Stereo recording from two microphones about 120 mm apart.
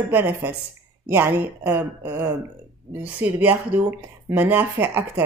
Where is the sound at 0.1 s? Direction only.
15° right (ahead or behind).